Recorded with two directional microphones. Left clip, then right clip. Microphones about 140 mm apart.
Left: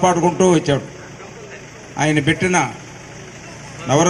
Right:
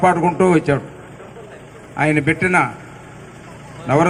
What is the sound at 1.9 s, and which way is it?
Speech, 30° right (ahead or behind).